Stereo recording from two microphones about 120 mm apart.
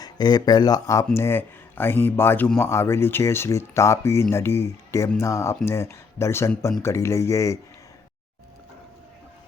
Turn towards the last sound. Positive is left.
turn(degrees=25)  # may be behind; listen again after turning